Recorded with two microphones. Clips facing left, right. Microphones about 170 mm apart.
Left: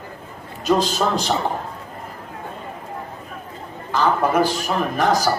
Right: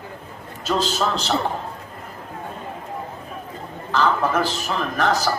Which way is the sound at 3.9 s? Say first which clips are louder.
Left 2 dB; 10° left (ahead or behind).